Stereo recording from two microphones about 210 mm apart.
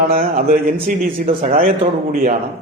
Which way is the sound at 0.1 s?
45° right (ahead or behind).